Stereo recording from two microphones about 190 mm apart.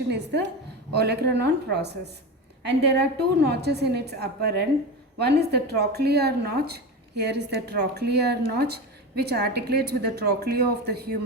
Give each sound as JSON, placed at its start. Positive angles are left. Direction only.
{"t": 0.1, "sound": "speech", "side_deg": -65}